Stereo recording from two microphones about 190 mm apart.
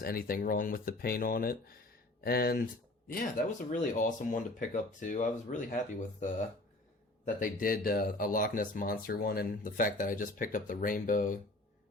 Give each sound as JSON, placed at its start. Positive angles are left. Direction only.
{"t": 0.0, "sound": "speech", "side_deg": 50}
{"t": 7.3, "sound": "speech", "side_deg": 45}